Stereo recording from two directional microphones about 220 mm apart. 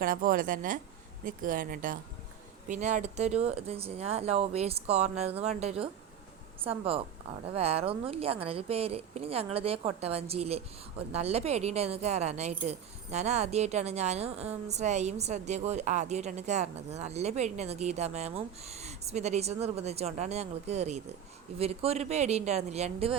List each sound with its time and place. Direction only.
0.0 s a woman's voice: 40° right (ahead or behind)